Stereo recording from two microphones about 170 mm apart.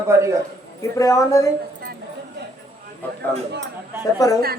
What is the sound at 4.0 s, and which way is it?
Speech, 20° left (ahead or behind).